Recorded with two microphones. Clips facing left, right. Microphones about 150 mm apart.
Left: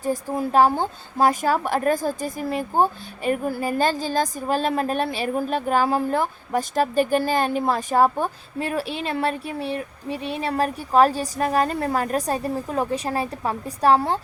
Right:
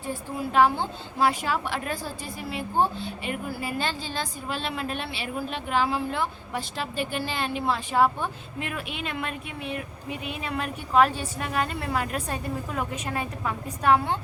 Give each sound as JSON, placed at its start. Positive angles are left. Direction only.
{"t": 0.0, "sound": "a woman's voice", "side_deg": 40}